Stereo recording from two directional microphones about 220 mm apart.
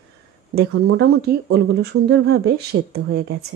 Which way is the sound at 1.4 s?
50° right (ahead or behind).